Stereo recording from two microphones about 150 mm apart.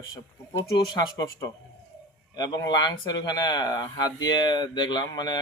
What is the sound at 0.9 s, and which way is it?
Speech, 25° left (ahead or behind).